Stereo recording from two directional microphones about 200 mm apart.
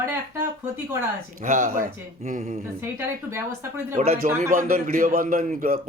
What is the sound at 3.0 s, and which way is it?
Speech, 10° right (ahead or behind).